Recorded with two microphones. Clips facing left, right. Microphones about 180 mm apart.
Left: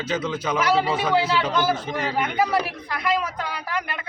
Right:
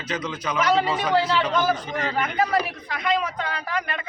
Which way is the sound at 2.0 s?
10° left (ahead or behind).